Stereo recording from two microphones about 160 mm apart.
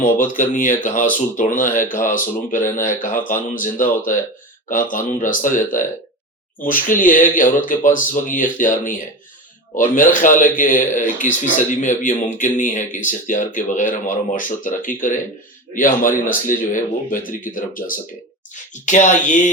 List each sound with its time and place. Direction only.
0.0 s speech: 55° left (ahead or behind)